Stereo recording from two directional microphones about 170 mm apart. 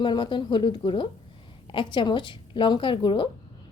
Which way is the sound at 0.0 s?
25° left (ahead or behind).